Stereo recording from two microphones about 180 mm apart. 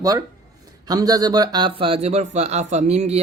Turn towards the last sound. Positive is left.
turn(degrees=-35)  # may be behind; listen again after turning